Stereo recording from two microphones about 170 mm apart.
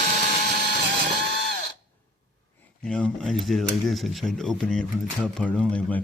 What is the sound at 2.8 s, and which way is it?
Speech, 5° left (ahead or behind).